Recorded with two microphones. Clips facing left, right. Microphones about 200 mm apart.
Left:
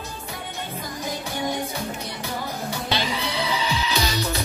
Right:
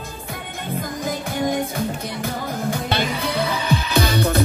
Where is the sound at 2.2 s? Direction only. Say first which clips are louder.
Right 5 dB; 50° right (ahead or behind).